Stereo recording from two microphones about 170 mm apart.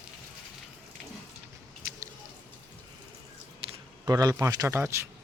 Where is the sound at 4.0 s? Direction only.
20° right (ahead or behind).